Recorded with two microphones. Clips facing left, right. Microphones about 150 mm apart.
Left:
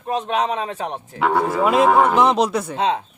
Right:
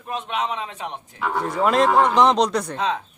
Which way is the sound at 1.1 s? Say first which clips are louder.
Left 6 dB; 75° left (ahead or behind).